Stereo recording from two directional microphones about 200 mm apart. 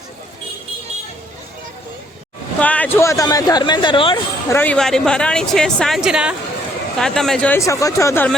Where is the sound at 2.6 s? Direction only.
5° left (ahead or behind); by 4.2 s 25° left (ahead or behind).